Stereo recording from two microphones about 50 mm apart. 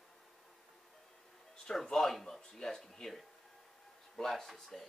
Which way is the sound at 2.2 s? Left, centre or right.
Centre.